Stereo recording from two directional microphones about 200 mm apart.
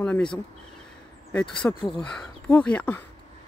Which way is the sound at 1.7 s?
15° left (ahead or behind).